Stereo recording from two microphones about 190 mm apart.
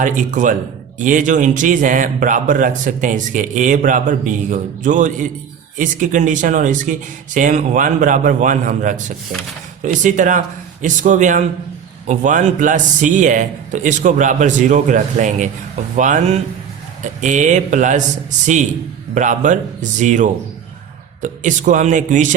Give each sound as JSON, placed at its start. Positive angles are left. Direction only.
{"t": 0.0, "sound": "a man's voice", "side_deg": -40}